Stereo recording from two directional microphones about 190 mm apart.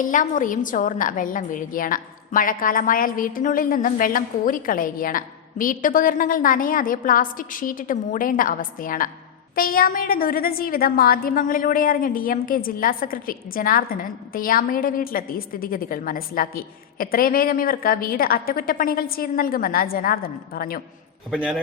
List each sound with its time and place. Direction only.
0.0 s a woman's voice: 45° left (ahead or behind)
21.2 s a man's voice: centre (ahead or behind)